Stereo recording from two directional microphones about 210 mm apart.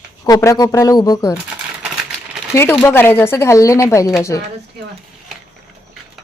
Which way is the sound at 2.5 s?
10° left (ahead or behind).